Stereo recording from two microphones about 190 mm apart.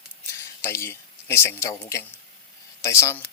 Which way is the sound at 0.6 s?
15° left (ahead or behind).